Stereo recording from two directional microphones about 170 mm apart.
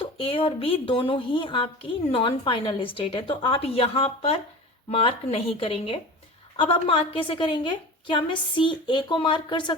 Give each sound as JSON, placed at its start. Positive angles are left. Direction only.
{"t": 0.0, "sound": "a woman's voice", "side_deg": 30}